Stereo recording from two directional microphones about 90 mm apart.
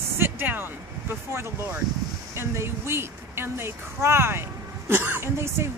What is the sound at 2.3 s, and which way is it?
A woman's voice, 30° right (ahead or behind).